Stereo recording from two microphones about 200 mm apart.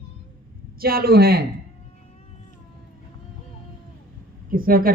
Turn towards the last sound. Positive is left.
turn(degrees=-45)  # may be behind; listen again after turning